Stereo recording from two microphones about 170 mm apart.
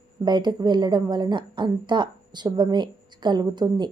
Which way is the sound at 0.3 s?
25° right (ahead or behind).